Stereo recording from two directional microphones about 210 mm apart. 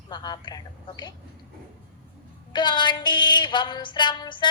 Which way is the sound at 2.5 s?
20° left (ahead or behind).